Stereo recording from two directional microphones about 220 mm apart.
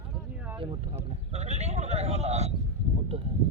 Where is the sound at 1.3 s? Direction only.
30° right (ahead or behind).